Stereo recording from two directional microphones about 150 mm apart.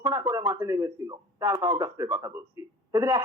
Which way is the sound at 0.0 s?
20° right (ahead or behind).